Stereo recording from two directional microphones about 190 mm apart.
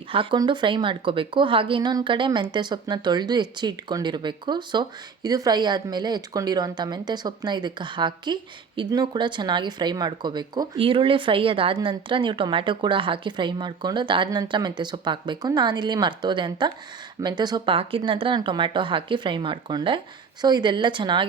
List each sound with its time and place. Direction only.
0.1 s a woman's voice: 25° right (ahead or behind)